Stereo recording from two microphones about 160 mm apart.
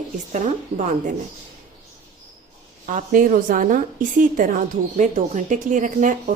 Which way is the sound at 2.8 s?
50° right (ahead or behind).